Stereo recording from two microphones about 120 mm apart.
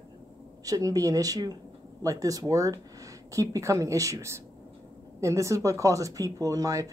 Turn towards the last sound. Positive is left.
turn(degrees=-30)  # may be behind; listen again after turning